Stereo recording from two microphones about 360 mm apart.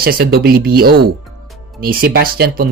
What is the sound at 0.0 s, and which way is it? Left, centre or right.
Speech, right.